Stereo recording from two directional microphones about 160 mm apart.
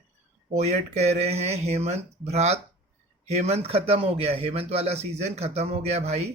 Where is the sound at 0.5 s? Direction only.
45° right (ahead or behind).